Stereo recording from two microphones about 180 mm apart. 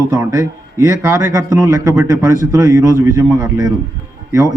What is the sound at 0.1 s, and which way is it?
A man's voice, 20° right (ahead or behind).